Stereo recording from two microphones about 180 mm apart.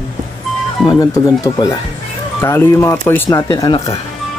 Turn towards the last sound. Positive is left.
turn(degrees=20)  # may be behind; listen again after turning